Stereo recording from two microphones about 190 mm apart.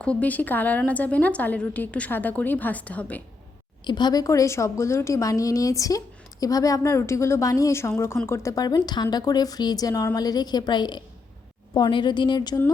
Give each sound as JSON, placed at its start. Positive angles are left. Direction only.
{"t": 0.0, "sound": "a woman's voice", "side_deg": 5}
{"t": 3.8, "sound": "a woman's voice", "side_deg": 25}